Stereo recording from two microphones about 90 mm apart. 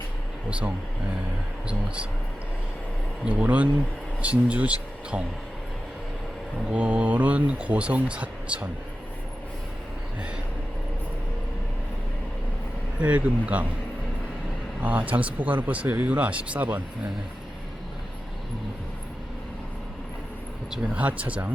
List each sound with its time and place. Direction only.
3.2 s speech: 15° right (ahead or behind)
6.7 s speech: 15° right (ahead or behind)
13.0 s speech: 15° right (ahead or behind)
14.8 s speech: 15° right (ahead or behind)
20.7 s speech: 15° right (ahead or behind)